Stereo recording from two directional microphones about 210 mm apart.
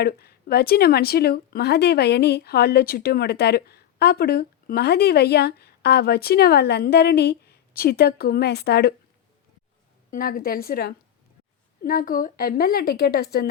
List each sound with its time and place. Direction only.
0.0 s speech: 50° left (ahead or behind)
10.1 s speech: 45° left (ahead or behind)